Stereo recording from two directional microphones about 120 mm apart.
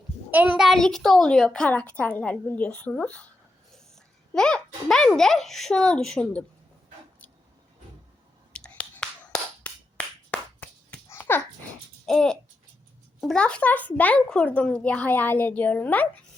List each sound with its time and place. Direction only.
0.3 s a child's voice: 15° right (ahead or behind); by 3.2 s 10° left (ahead or behind)
4.4 s a child's voice: 5° left (ahead or behind)
8.5 s finger snapping: 10° left (ahead or behind)
11.1 s babbling: 15° left (ahead or behind)
12.0 s a child's voice: 5° left (ahead or behind)